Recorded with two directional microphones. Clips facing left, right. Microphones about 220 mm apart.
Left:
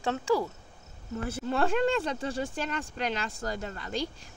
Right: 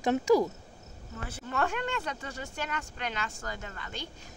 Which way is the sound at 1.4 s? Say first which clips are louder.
Left 6 dB; 30° left (ahead or behind).